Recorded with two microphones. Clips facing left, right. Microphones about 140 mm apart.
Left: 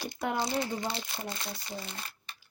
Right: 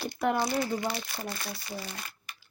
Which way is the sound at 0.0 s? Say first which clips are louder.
Right 4 dB; 20° left (ahead or behind).